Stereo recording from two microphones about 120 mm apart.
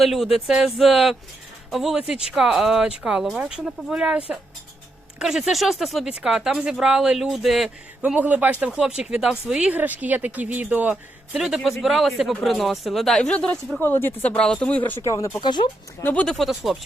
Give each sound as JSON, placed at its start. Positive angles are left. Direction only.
{"t": 0.0, "sound": "speech", "side_deg": 0}
{"t": 5.2, "sound": "speech", "side_deg": -5}
{"t": 8.0, "sound": "speech", "side_deg": -10}
{"t": 11.3, "sound": "speech", "side_deg": 0}
{"t": 13.7, "sound": "speech", "side_deg": 20}
{"t": 14.8, "sound": "speech", "side_deg": 25}
{"t": 15.4, "sound": "speech", "side_deg": 40}
{"t": 16.0, "sound": "speech", "side_deg": 5}